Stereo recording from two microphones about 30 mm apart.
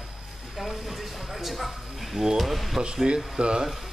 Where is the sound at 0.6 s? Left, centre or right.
Centre.